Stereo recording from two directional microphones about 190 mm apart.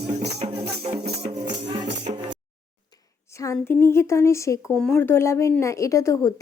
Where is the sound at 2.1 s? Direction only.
30° right (ahead or behind).